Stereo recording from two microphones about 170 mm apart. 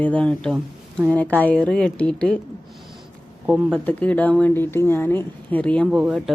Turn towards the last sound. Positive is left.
turn(degrees=0)  # may be behind; listen again after turning